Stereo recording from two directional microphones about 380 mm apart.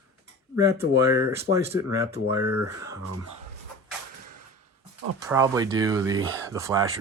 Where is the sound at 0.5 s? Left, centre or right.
Centre.